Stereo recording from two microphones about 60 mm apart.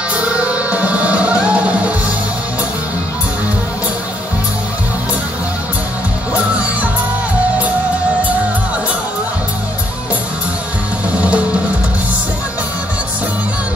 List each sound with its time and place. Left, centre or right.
0.1 s music: centre
11.1 s music: right